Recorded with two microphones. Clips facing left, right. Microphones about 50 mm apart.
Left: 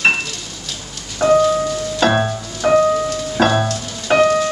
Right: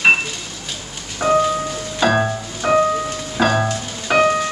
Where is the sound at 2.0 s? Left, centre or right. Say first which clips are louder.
Even; centre.